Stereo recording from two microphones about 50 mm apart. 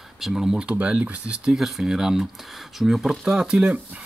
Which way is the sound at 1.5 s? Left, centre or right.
Centre.